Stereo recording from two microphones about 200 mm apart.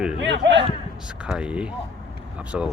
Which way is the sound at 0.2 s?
65° right (ahead or behind).